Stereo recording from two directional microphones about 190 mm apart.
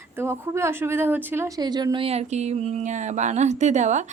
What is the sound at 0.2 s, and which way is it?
Speech, 15° right (ahead or behind).